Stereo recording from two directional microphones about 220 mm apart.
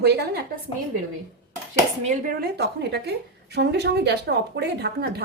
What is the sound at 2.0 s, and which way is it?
A woman's voice, 40° right (ahead or behind).